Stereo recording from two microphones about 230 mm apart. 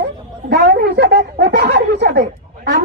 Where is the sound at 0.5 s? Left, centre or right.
Right.